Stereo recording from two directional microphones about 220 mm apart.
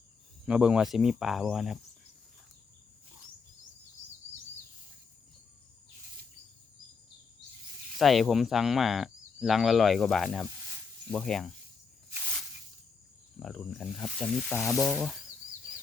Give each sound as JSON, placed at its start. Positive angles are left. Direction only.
{"t": 0.4, "sound": "speech", "side_deg": -5}
{"t": 7.9, "sound": "speech", "side_deg": 0}
{"t": 13.4, "sound": "speech", "side_deg": 0}